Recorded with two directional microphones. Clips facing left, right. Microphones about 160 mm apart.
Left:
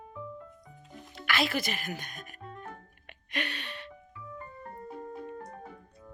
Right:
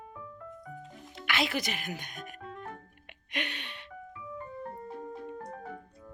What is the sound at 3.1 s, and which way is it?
Music, 20° right (ahead or behind).